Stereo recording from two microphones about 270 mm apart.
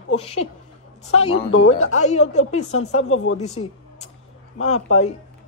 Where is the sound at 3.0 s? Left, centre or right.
Left.